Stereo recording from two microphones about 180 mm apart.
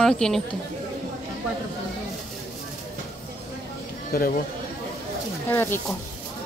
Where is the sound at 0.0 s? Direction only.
5° left (ahead or behind).